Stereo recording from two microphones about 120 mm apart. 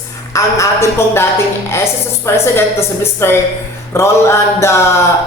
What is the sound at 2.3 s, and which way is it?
Mantra, 25° left (ahead or behind).